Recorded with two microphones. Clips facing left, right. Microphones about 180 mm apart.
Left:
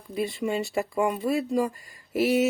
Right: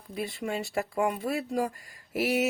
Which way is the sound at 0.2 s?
Centre (ahead or behind).